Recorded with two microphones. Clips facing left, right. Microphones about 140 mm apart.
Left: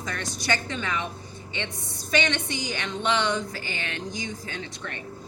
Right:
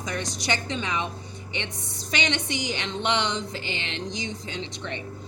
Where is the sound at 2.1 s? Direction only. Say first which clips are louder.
Left 2 dB; 20° right (ahead or behind).